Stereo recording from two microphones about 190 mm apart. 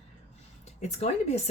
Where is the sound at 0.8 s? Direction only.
35° left (ahead or behind).